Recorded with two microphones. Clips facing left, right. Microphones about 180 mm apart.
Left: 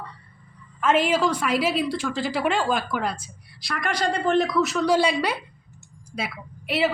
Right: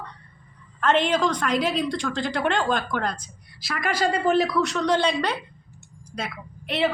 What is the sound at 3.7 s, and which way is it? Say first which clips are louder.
A woman's voice: right 1 dB; 5° right (ahead or behind).